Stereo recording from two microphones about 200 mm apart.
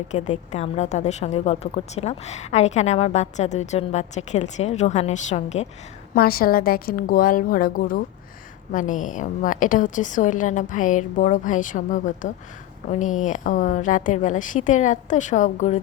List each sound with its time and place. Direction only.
0.1 s a woman's voice: 35° left (ahead or behind)
6.1 s a woman's voice: 50° left (ahead or behind)